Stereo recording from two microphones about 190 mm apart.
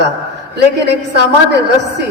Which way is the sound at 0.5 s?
60° right (ahead or behind).